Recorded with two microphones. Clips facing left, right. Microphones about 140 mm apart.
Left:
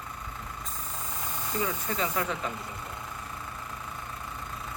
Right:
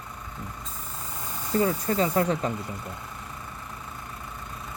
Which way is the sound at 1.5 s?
40° right (ahead or behind).